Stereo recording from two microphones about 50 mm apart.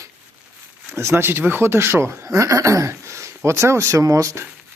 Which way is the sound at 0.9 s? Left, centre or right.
Right.